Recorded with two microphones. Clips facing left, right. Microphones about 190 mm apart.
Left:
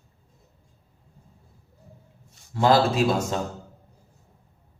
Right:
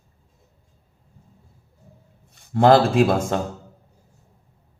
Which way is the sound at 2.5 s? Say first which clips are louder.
Right 5 dB; 55° right (ahead or behind).